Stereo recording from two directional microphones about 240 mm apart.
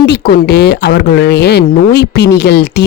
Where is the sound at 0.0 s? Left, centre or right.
Left.